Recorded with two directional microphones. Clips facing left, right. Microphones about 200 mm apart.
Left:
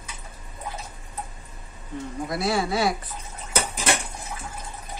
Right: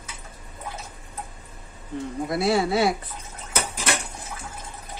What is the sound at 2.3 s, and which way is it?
Stir, 25° right (ahead or behind).